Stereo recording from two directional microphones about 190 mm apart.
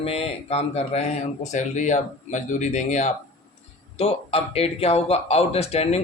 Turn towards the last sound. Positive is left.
turn(degrees=35)  # may be behind; listen again after turning